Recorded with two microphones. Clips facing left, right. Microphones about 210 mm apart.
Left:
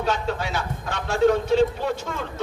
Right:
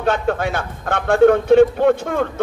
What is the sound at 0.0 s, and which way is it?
A man's voice, 55° right (ahead or behind).